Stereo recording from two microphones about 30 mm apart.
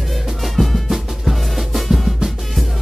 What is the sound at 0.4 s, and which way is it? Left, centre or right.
Music, centre.